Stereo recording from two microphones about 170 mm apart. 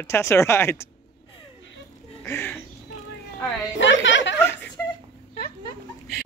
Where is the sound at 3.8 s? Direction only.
90° left.